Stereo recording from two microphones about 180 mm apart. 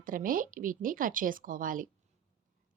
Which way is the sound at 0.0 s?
50° right (ahead or behind).